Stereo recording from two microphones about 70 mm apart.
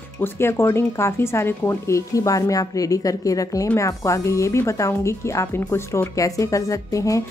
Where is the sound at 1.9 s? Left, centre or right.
Left.